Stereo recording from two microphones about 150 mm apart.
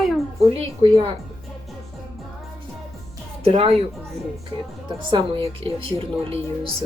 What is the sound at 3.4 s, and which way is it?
Speech, 45° right (ahead or behind).